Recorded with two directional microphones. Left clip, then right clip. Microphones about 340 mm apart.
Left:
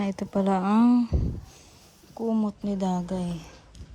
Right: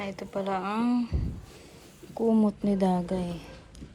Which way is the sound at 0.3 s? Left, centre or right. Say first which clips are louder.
Left 5 dB; left.